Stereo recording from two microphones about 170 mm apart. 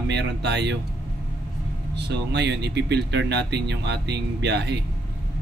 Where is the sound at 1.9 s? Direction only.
85° right.